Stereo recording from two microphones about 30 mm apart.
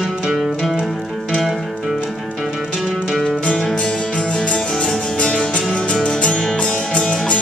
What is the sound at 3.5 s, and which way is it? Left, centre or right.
Music, left.